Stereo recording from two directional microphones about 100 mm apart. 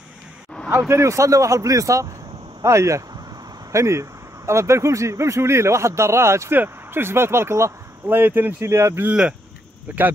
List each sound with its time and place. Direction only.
0.7 s speech: 25° right (ahead or behind)